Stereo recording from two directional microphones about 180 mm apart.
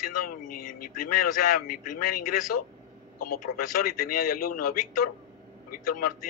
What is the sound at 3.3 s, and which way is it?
A man's voice, 55° left (ahead or behind).